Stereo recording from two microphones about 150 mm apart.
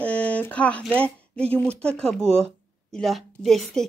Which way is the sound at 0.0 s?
10° left (ahead or behind).